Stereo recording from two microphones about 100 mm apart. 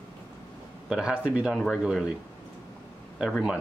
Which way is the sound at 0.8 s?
5° right (ahead or behind).